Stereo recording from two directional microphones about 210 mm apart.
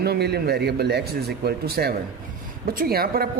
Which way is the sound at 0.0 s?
50° right (ahead or behind).